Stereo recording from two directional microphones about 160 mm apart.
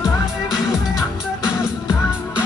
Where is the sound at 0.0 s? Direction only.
5° right (ahead or behind).